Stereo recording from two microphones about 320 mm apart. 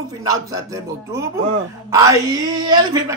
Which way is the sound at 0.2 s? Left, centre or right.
Centre.